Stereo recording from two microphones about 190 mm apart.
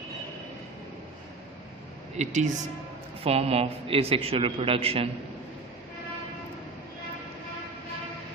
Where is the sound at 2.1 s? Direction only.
40° right (ahead or behind).